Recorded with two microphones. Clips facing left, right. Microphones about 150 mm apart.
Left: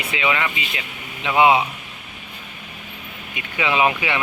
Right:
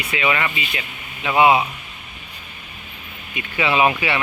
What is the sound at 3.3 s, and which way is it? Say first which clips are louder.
Speech: right 2 dB; 15° left (ahead or behind).